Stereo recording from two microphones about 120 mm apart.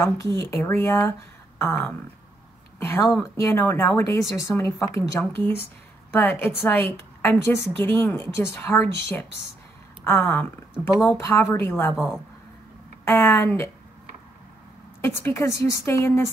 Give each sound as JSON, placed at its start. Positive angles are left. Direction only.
{"t": 0.0, "sound": "a woman's voice", "side_deg": 25}
{"t": 13.0, "sound": "a woman's voice", "side_deg": 20}
{"t": 15.0, "sound": "a woman's voice", "side_deg": 20}